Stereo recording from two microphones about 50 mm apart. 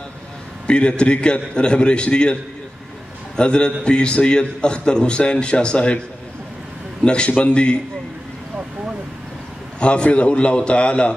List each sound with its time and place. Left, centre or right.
0.7 s a man's voice: left
3.3 s a man's voice: centre
7.0 s a man's voice: centre
9.8 s a man's voice: left